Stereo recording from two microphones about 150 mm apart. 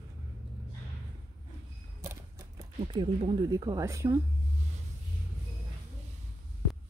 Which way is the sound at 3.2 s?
25° right (ahead or behind).